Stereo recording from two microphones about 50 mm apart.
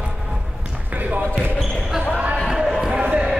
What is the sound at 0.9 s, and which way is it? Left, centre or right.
Basketball bounce, right.